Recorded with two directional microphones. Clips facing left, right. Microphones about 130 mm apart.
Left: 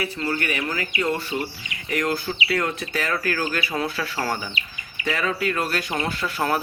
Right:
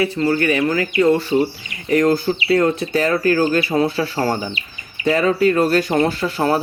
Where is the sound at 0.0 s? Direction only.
35° right (ahead or behind).